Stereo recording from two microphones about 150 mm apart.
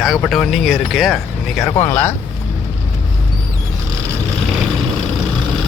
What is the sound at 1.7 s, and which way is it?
Speech, 15° left (ahead or behind).